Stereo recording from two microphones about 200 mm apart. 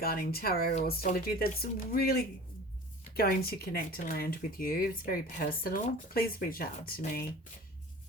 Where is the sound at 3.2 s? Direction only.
50° left (ahead or behind).